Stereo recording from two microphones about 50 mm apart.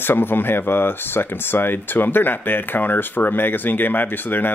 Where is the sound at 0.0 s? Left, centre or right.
Left.